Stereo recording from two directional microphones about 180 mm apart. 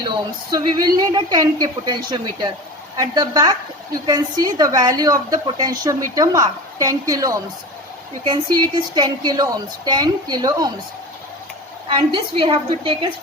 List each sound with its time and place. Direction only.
0.5 s a woman's voice: 25° right (ahead or behind)
11.9 s a woman's voice: 25° right (ahead or behind)